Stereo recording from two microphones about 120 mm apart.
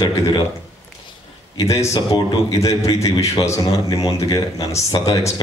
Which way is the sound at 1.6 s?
25° left (ahead or behind).